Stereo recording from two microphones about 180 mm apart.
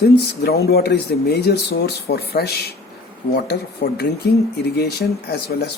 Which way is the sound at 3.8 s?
60° left (ahead or behind).